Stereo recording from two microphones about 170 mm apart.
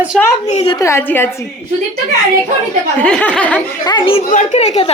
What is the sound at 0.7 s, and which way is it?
Speech, 15° left (ahead or behind).